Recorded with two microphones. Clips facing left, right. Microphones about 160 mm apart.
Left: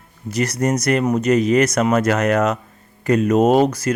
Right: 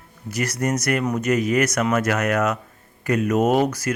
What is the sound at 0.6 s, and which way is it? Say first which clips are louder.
Speech: left 4 dB; 30° left (ahead or behind).